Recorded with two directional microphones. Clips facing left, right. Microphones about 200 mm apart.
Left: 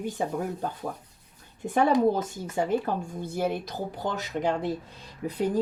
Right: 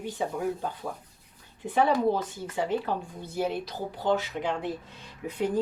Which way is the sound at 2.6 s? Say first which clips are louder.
Left 2 dB; 45° left (ahead or behind).